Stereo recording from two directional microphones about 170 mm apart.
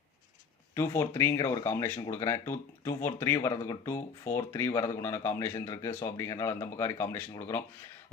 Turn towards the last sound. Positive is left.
turn(degrees=15)  # may be behind; listen again after turning